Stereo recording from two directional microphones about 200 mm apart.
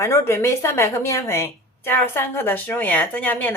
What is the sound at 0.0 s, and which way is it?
A woman's voice, 15° left (ahead or behind).